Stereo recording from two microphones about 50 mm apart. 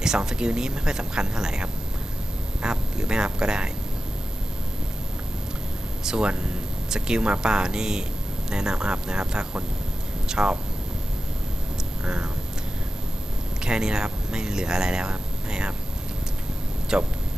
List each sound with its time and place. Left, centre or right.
0.0 s speech: centre
6.0 s speech: centre
12.0 s speech: centre
13.7 s speech: centre
16.9 s speech: centre